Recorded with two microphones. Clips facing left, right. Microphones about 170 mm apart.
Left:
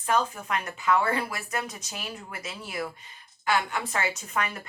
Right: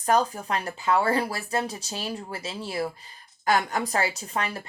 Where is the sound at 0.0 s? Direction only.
35° right (ahead or behind).